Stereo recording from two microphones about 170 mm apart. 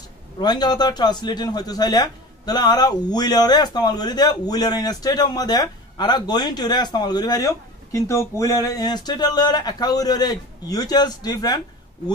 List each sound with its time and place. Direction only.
0.4 s a man's voice: 25° left (ahead or behind)